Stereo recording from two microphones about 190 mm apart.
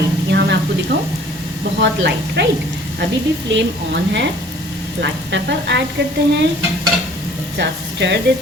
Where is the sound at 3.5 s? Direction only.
70° right (ahead or behind).